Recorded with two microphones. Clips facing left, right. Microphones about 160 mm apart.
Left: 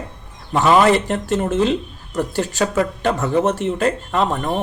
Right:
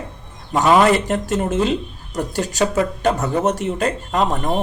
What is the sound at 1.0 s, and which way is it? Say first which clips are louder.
Speech: even; 40° right (ahead or behind).